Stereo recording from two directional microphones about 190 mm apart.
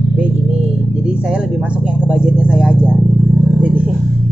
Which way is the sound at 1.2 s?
5° right (ahead or behind).